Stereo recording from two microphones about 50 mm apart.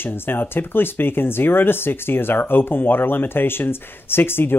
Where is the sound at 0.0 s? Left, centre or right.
Left.